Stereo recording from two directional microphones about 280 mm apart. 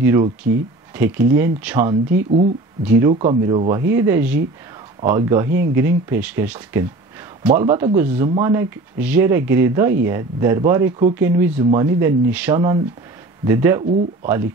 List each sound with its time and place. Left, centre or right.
0.0 s speech: centre